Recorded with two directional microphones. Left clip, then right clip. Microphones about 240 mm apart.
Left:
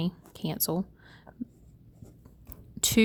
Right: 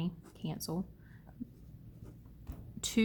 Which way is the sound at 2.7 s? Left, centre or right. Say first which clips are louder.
Left 9 dB; left.